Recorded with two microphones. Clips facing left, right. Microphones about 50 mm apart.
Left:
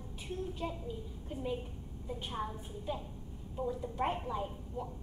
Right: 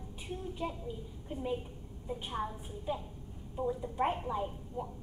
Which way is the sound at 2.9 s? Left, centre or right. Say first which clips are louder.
Right 3 dB; right.